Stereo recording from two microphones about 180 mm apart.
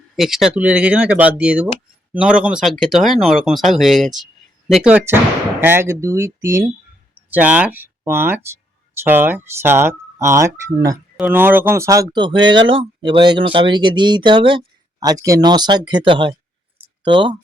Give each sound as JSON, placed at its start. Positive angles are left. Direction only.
{"t": 0.2, "sound": "speech", "side_deg": 0}